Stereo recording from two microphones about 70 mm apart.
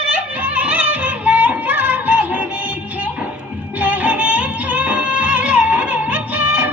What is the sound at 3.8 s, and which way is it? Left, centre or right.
Music, right.